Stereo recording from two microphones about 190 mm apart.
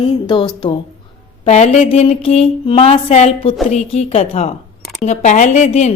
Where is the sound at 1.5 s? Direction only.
35° left (ahead or behind).